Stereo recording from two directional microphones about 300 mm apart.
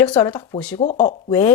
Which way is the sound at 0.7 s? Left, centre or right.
Left.